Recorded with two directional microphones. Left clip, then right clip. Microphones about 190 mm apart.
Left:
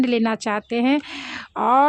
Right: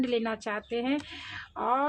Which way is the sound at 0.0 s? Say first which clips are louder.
Left 8 dB; 45° left (ahead or behind).